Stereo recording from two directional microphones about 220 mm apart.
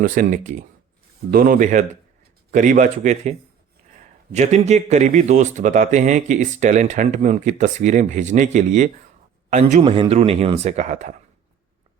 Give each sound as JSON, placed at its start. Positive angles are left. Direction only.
{"t": 0.0, "sound": "a man's voice", "side_deg": -40}